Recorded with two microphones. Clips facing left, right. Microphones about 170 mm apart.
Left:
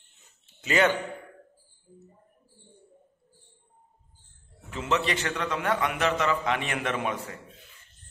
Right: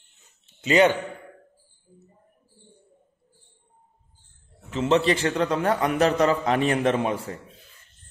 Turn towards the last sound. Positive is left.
turn(degrees=-30)  # may be behind; listen again after turning